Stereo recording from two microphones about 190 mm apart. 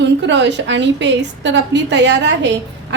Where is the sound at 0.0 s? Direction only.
70° right (ahead or behind).